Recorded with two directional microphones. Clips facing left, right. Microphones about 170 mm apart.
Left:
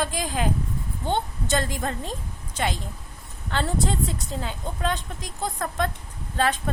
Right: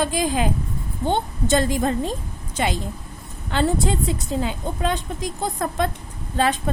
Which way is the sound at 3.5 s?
5° right (ahead or behind).